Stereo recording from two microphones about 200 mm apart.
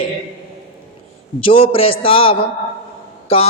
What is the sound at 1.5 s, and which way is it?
A man's voice, 30° left (ahead or behind).